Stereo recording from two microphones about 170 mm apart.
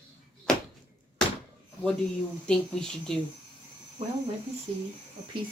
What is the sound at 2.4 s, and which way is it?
Speech, 5° left (ahead or behind).